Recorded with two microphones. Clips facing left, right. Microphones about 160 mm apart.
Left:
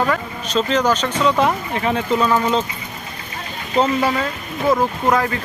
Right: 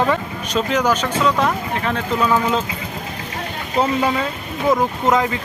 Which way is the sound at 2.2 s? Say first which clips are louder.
Right 1 dB; 10° right (ahead or behind).